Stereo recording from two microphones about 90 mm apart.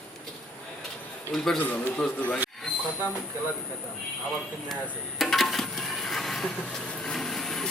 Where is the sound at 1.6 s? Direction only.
15° left (ahead or behind).